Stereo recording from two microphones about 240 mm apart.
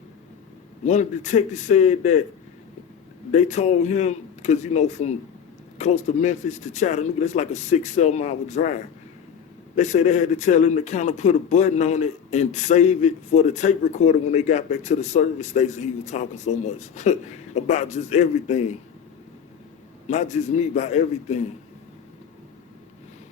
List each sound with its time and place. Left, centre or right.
0.9 s speech: left
3.3 s speech: left
20.1 s speech: left